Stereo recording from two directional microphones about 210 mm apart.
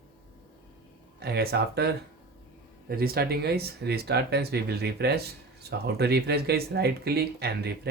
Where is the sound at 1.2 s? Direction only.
50° right (ahead or behind).